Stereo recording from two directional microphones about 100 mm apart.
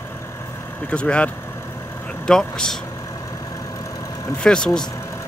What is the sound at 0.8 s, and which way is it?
Speech, 10° left (ahead or behind).